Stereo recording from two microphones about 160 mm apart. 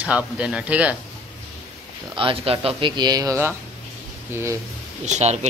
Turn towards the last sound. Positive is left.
turn(degrees=-45)  # may be behind; listen again after turning